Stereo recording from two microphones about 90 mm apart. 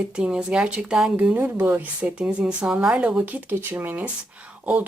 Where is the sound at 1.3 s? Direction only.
20° right (ahead or behind).